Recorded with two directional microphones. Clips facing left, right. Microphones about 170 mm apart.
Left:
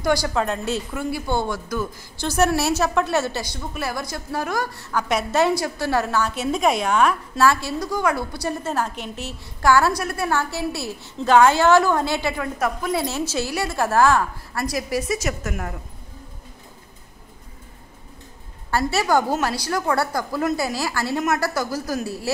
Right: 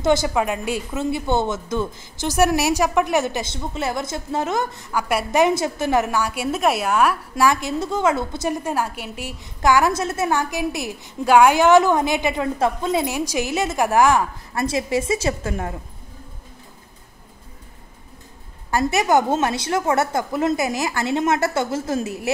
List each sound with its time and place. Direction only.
0.0 s speech: 20° right (ahead or behind)
4.9 s a woman's voice: 10° right (ahead or behind); by 13.0 s 25° right (ahead or behind)
13.0 s speech: 15° right (ahead or behind); by 15.7 s 30° right (ahead or behind)
18.7 s speech: 15° right (ahead or behind)